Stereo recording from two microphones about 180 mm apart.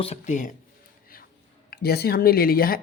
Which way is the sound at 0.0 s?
40° left (ahead or behind).